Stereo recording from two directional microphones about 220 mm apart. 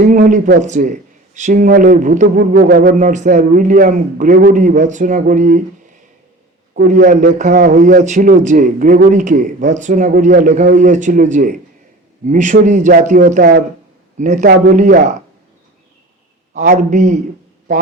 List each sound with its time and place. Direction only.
0.0 s a man's voice: 35° right (ahead or behind)
6.8 s a man's voice: 35° right (ahead or behind)
16.6 s a man's voice: 35° right (ahead or behind)